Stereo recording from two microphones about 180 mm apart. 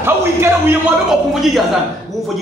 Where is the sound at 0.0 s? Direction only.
10° right (ahead or behind).